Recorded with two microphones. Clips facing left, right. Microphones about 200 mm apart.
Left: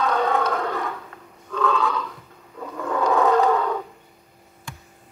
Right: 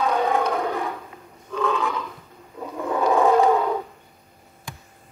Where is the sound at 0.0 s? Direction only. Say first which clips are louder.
Even; 10° right (ahead or behind).